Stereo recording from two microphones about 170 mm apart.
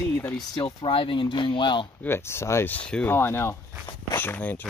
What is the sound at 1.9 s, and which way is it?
Speech, 15° left (ahead or behind).